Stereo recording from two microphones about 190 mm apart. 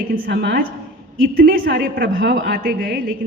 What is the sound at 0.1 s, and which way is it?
A woman's voice, 60° right (ahead or behind).